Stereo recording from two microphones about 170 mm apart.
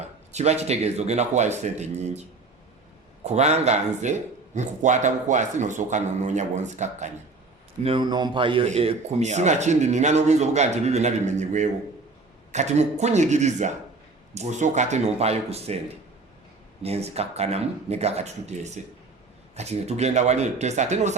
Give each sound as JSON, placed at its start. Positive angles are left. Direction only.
{"t": 0.3, "sound": "speech", "side_deg": -40}
{"t": 3.2, "sound": "speech", "side_deg": -40}
{"t": 7.8, "sound": "speech", "side_deg": -30}
{"t": 16.8, "sound": "speech", "side_deg": -35}